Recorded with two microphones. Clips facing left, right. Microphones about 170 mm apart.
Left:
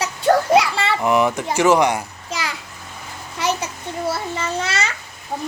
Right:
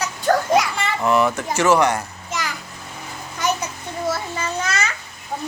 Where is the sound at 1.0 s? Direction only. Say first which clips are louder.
Even; 15° left (ahead or behind).